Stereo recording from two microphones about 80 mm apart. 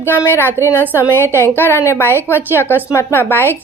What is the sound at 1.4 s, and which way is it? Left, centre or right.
A woman's voice, left.